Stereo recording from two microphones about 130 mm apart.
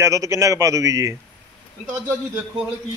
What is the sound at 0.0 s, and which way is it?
A man's voice, 25° right (ahead or behind).